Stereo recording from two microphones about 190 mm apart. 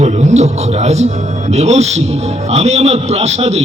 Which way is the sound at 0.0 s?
35° right (ahead or behind).